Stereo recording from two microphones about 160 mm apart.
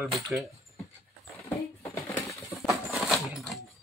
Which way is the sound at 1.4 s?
15° left (ahead or behind).